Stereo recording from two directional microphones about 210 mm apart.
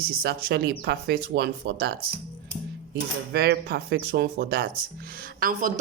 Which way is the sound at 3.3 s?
50° right (ahead or behind).